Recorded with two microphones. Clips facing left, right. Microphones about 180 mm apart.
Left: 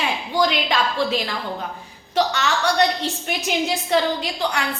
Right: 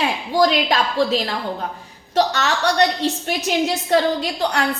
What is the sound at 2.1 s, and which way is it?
Speech, 40° right (ahead or behind).